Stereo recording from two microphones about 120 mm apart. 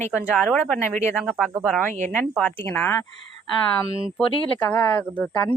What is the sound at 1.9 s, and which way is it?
Speech, 90° right.